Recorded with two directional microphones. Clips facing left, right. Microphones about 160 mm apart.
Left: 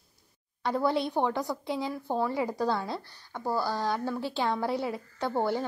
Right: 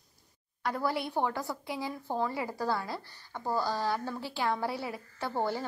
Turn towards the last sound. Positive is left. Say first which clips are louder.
# left 4 dB
turn(degrees=15)  # may be behind; listen again after turning